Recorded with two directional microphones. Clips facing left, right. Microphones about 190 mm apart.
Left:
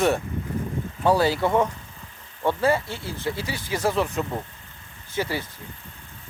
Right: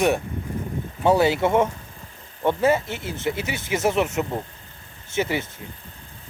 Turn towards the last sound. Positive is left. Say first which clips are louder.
# right 3 dB
turn(degrees=-20)  # may be behind; listen again after turning